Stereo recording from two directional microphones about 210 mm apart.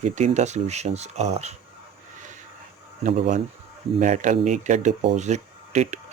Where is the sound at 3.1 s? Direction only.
30° right (ahead or behind).